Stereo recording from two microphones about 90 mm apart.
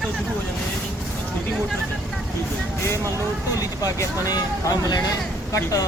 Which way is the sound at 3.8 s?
40° left (ahead or behind).